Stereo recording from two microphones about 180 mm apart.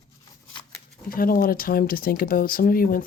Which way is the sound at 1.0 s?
55° left (ahead or behind).